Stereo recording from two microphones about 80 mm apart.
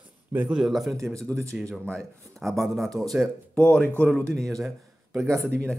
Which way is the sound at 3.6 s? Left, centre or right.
Centre.